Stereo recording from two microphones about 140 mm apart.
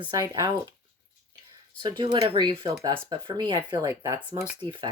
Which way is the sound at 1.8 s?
35° right (ahead or behind).